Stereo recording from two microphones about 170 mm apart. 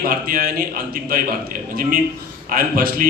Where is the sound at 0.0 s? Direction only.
60° right (ahead or behind).